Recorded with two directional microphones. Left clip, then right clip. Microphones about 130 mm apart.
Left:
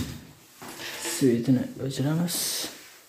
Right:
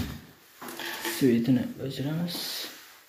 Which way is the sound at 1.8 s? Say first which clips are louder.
Left 4 dB; 45° left (ahead or behind).